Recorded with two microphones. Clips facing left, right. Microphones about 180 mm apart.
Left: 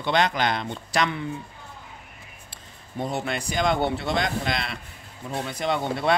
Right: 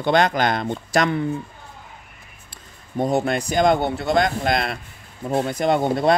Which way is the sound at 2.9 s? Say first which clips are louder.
Right 8 dB; 45° right (ahead or behind).